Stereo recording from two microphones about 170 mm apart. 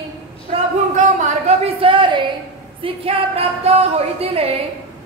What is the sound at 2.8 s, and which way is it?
Speech, 35° right (ahead or behind).